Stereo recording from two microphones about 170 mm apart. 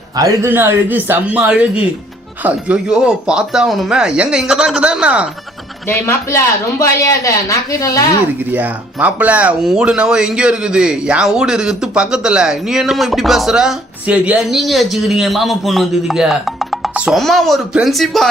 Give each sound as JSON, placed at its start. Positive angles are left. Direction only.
{"t": 0.2, "sound": "speech", "side_deg": -15}
{"t": 5.9, "sound": "speech", "side_deg": 15}
{"t": 8.5, "sound": "speech", "side_deg": -10}